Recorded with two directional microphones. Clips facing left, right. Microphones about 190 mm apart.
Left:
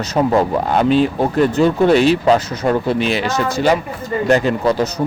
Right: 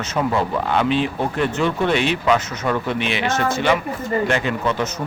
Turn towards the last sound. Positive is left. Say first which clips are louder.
# left 6 dB
turn(degrees=35)  # may be behind; listen again after turning